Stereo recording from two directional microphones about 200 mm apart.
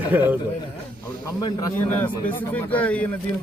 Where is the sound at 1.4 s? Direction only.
20° left (ahead or behind).